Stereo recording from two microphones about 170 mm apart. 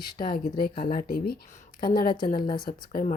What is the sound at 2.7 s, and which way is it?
Speech, 55° left (ahead or behind).